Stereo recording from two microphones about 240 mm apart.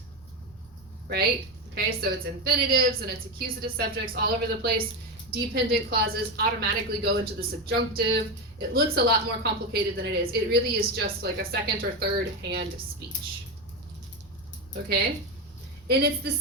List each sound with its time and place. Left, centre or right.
1.0 s a woman's voice: right
15.9 s a woman's voice: right